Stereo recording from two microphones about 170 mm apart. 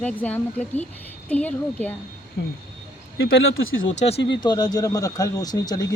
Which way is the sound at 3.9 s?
40° left (ahead or behind).